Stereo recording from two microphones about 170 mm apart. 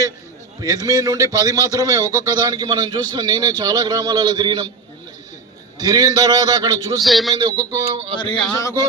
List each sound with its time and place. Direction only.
0.6 s a man's voice: 20° right (ahead or behind)
5.7 s a man's voice: 20° right (ahead or behind)
7.0 s a man's voice: centre (ahead or behind)
7.3 s a man's voice: 25° right (ahead or behind)
8.1 s speech: 30° left (ahead or behind)